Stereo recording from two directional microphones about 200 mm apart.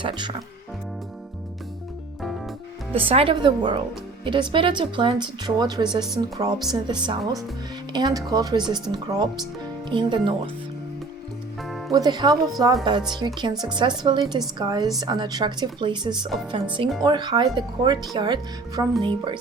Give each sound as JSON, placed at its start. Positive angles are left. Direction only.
{"t": 0.0, "sound": "speech", "side_deg": -25}
{"t": 2.9, "sound": "speech", "side_deg": -30}
{"t": 11.9, "sound": "speech", "side_deg": -20}